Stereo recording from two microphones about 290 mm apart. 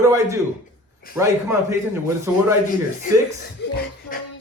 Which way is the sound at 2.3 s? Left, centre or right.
Centre.